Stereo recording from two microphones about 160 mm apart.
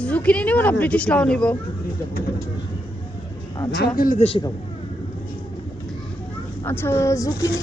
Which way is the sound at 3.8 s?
65° left (ahead or behind).